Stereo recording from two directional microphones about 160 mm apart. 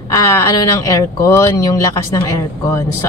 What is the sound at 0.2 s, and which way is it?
Speech, 20° left (ahead or behind).